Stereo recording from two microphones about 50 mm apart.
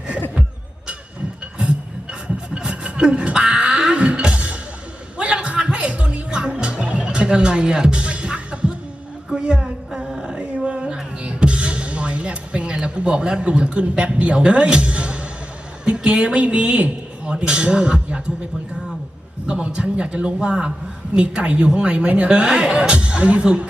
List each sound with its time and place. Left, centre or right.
2.6 s music: centre
9.3 s a sound: centre
10.3 s a sound: right
11.2 s music: right
15.8 s a woman's voice: centre
19.5 s speech: centre